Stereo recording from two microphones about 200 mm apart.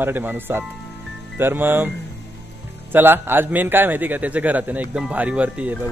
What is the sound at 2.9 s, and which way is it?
A man's voice, 10° right (ahead or behind).